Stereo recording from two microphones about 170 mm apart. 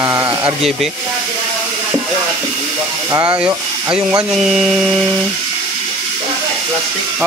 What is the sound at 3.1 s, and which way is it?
Speech, 10° right (ahead or behind).